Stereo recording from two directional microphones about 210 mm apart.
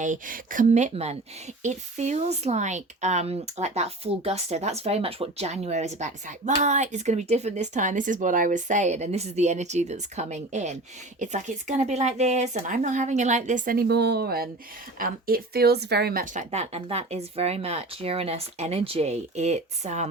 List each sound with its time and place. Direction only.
0.0 s speech: 40° right (ahead or behind)